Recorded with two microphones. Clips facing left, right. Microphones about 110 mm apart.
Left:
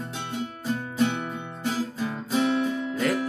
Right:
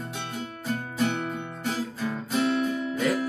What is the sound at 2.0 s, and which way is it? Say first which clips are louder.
Guitar: even; 20° left (ahead or behind).